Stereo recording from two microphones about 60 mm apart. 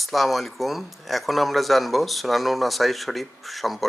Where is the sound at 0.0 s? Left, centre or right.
Centre.